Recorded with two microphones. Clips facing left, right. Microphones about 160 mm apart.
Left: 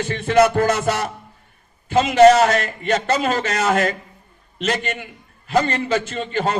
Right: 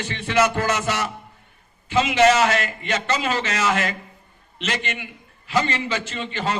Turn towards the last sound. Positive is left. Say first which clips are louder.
# left 4 dB
turn(degrees=50)  # may be behind; listen again after turning